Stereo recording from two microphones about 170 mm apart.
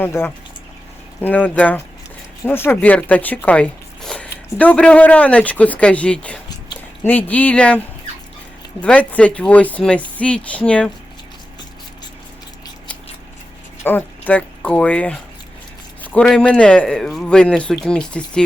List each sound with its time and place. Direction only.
0.0 s speech: 15° left (ahead or behind)
8.8 s speech: 10° left (ahead or behind)
13.8 s speech: 10° left (ahead or behind)